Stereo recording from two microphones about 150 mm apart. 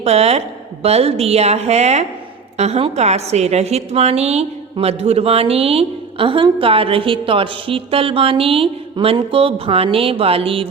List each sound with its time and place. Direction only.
0.0 s a woman's voice: 45° right (ahead or behind)